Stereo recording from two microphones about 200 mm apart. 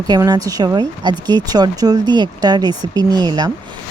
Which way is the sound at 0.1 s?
20° right (ahead or behind).